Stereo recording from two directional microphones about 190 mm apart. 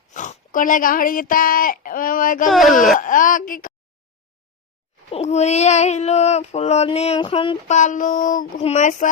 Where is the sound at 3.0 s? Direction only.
45° left (ahead or behind).